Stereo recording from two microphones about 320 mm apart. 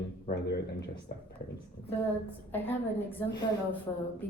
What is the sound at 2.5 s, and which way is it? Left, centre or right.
Speech, centre.